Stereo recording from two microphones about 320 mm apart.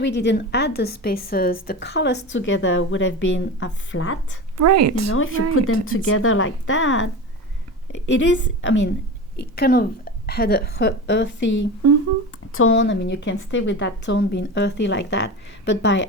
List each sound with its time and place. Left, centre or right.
0.0 s a woman's voice: left
4.5 s speech: right
5.1 s a woman's voice: left
12.5 s a woman's voice: left